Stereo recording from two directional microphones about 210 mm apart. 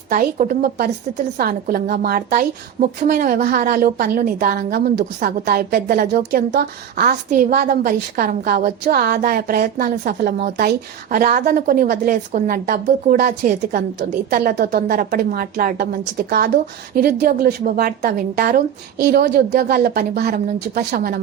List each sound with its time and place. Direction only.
0.1 s a woman's voice: 40° right (ahead or behind)